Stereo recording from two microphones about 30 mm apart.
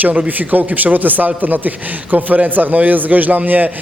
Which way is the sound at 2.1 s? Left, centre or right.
Right.